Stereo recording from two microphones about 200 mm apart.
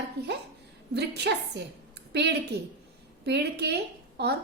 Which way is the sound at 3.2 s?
55° right (ahead or behind).